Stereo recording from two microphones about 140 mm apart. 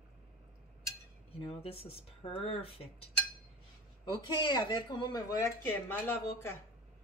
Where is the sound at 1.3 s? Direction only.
45° left (ahead or behind).